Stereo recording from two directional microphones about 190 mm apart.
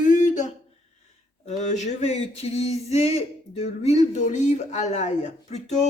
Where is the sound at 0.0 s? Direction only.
40° left (ahead or behind).